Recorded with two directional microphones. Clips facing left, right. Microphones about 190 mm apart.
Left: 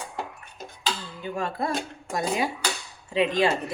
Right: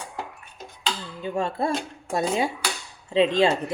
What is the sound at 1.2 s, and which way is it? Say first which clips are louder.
Speech: right 4 dB; 25° right (ahead or behind).